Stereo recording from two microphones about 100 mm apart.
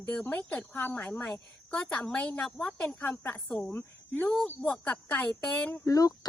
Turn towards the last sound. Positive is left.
turn(degrees=35)  # may be behind; listen again after turning